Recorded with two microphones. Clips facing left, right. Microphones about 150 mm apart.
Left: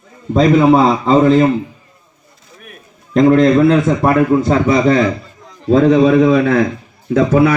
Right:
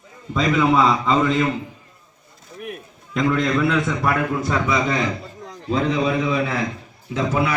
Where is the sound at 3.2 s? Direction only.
40° left (ahead or behind).